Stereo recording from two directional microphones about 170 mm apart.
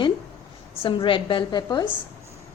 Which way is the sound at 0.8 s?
30° left (ahead or behind).